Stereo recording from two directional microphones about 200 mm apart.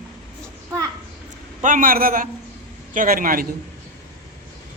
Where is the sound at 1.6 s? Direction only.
40° right (ahead or behind).